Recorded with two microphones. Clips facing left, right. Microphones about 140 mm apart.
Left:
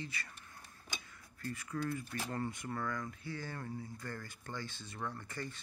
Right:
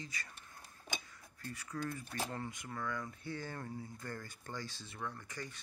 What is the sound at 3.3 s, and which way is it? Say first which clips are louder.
Speech: right 1 dB; 20° right (ahead or behind).